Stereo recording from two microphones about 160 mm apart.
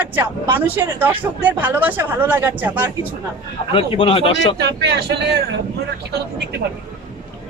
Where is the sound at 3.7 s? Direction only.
35° left (ahead or behind).